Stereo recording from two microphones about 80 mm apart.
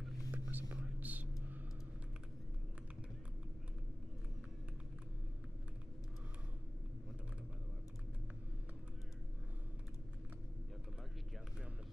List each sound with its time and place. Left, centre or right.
0.3 s whispering: right
0.7 s whispering: centre